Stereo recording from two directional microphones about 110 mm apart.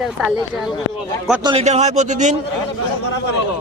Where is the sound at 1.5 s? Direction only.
85° right.